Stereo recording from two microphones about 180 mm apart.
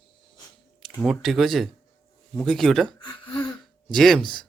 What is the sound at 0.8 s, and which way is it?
Speech, centre (ahead or behind).